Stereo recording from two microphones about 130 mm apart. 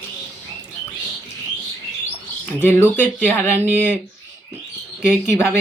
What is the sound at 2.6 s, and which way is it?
Speech, 15° left (ahead or behind).